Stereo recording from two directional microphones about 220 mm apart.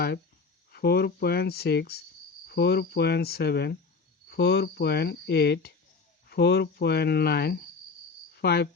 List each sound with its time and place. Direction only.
0.7 s speech: 45° left (ahead or behind)